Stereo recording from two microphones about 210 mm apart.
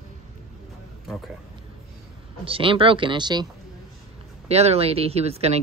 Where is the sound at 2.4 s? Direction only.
25° right (ahead or behind).